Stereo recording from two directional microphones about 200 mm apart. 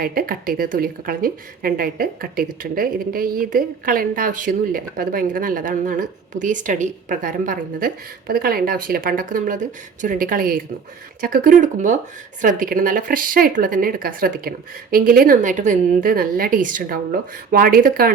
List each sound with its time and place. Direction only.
0.0 s a woman's voice: 45° right (ahead or behind)